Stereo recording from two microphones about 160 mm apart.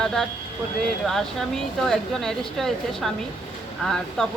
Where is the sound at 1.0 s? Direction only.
5° left (ahead or behind).